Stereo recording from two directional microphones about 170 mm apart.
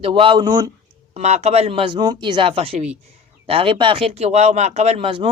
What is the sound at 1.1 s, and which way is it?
Speech, 40° right (ahead or behind).